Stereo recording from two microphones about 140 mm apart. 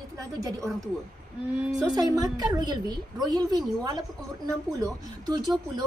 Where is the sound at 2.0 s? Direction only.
25° right (ahead or behind).